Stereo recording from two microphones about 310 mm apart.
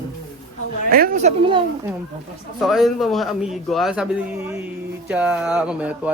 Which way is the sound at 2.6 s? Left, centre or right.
Centre.